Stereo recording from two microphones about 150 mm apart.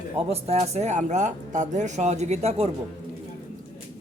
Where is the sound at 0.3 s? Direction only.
45° right (ahead or behind).